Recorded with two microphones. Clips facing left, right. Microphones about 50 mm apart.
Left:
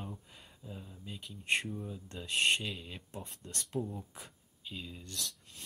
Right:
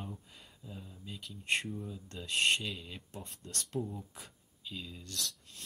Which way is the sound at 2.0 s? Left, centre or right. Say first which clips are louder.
Even; left.